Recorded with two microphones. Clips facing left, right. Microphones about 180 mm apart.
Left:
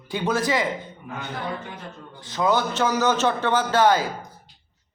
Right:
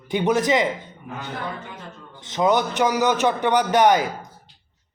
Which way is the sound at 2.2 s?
20° right (ahead or behind).